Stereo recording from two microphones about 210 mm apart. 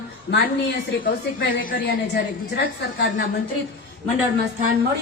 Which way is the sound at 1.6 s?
40° left (ahead or behind).